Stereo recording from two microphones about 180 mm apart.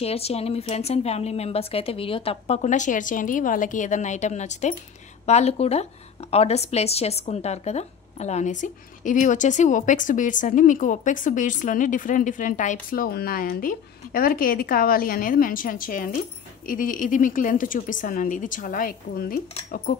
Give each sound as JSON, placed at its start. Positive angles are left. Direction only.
{"t": 0.0, "sound": "a woman's voice", "side_deg": 35}